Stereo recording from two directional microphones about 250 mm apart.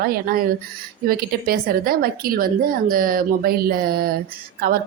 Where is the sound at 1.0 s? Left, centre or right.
Right.